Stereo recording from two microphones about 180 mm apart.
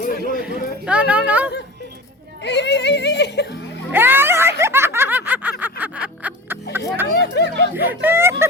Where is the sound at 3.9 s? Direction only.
10° right (ahead or behind).